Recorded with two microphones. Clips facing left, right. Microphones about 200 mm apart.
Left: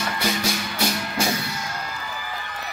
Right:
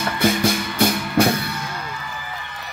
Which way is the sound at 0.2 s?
50° right (ahead or behind).